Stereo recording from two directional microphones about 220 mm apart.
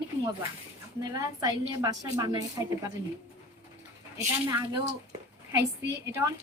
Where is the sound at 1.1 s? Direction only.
15° right (ahead or behind).